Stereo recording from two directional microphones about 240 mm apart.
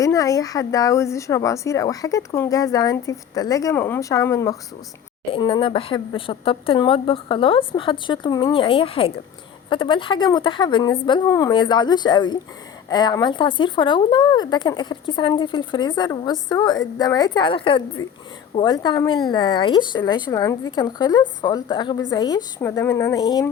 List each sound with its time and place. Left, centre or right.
0.0 s speech: centre